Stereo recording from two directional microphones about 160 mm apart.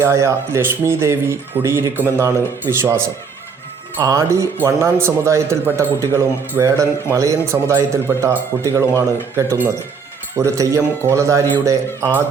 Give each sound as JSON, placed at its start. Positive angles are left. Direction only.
{"t": 0.0, "sound": "speech", "side_deg": -15}
{"t": 4.0, "sound": "speech", "side_deg": -20}